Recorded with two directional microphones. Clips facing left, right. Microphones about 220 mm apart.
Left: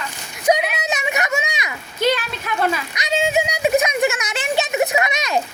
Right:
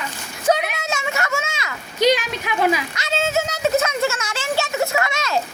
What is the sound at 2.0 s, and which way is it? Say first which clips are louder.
Speech: right 2 dB; 15° right (ahead or behind).